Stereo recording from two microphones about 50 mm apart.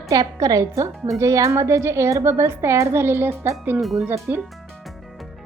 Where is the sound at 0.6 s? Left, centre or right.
Right.